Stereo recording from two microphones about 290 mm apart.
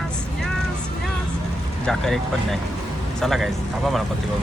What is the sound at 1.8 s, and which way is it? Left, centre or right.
Speech, centre.